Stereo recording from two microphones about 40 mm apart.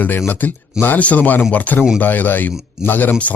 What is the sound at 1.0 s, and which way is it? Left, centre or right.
Speech, left.